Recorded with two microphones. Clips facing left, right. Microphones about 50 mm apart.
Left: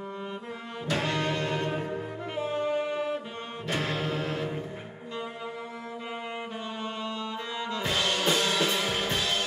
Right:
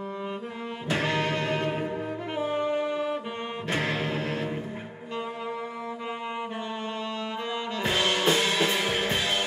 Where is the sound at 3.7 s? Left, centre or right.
Right.